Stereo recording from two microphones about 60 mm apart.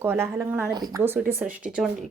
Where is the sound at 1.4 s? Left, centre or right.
Centre.